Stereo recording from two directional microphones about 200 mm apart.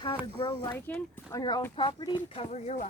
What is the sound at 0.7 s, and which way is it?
A woman's voice, 10° left (ahead or behind).